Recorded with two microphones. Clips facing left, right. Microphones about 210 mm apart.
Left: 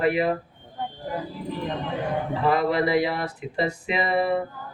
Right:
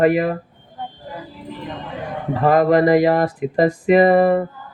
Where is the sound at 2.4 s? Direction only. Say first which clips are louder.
Right 9 dB; 45° right (ahead or behind).